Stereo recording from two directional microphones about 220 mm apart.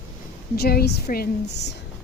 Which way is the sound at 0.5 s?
45° left (ahead or behind).